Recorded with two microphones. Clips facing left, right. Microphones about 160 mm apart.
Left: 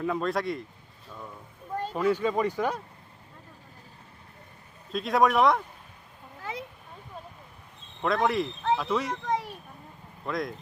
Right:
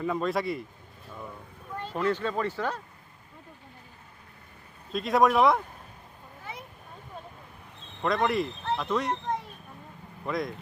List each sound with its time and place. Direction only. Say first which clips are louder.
0.0 s speech: even; centre (ahead or behind)
1.9 s speech: left 2 dB; 10° left (ahead or behind)
4.9 s speech: right 1 dB; centre (ahead or behind)
6.4 s a sound: left 6 dB; 90° left
8.0 s speech: left 1 dB; centre (ahead or behind)
9.2 s children playing: left 3 dB; 85° left
10.2 s speech: right 1 dB; centre (ahead or behind)